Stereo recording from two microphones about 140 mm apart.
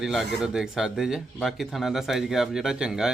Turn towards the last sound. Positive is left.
turn(degrees=-5)  # may be behind; listen again after turning